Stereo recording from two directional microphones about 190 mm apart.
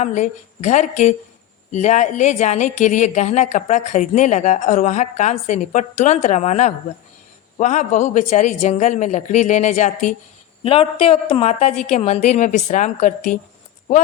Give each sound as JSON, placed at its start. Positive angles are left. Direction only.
{"t": 0.0, "sound": "a woman's voice", "side_deg": 40}